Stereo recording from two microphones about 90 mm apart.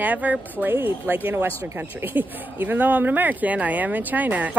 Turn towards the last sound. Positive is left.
turn(degrees=-15)  # may be behind; listen again after turning